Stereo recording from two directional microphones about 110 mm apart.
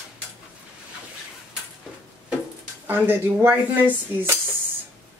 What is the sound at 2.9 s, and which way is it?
Speech, 20° right (ahead or behind).